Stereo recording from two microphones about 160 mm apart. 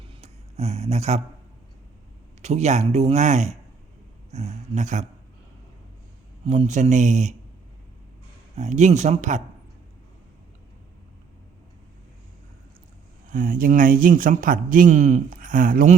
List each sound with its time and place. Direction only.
0.0 s a sound: 40° right (ahead or behind)
2.4 s speech: 45° right (ahead or behind)
6.4 s speech: 45° right (ahead or behind)
8.5 s speech: 45° right (ahead or behind)
13.3 s a man's voice: 60° right (ahead or behind)